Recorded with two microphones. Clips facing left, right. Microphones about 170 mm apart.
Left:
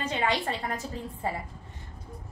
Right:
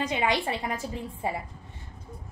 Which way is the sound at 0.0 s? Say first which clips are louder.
Right 2 dB; 15° right (ahead or behind).